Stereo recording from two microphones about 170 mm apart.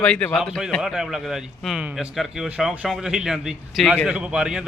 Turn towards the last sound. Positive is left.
turn(degrees=-5)  # may be behind; listen again after turning